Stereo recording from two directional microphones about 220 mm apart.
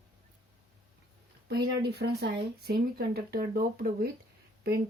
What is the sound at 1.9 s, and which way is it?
Speech, 45° right (ahead or behind).